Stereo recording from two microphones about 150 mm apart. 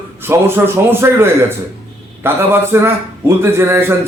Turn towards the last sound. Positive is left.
turn(degrees=-15)  # may be behind; listen again after turning